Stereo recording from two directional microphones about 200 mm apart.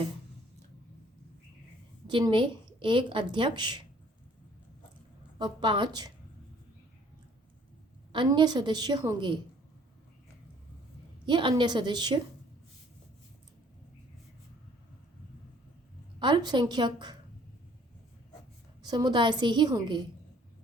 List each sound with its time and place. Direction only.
2.0 s a woman's voice: 25° right (ahead or behind)
5.4 s a woman's voice: 25° right (ahead or behind)
8.1 s a woman's voice: 25° right (ahead or behind)
11.3 s a woman's voice: 25° right (ahead or behind)
16.2 s a woman's voice: 20° right (ahead or behind)
18.8 s a woman's voice: 20° right (ahead or behind)